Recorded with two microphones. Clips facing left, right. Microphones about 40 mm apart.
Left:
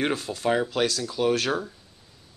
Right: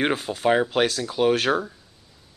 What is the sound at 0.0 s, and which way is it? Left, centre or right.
Speech, right.